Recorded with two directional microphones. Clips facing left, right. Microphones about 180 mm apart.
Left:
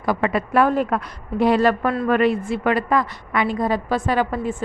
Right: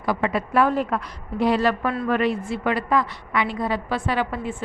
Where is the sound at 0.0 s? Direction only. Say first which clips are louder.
Left 2 dB; 50° left (ahead or behind).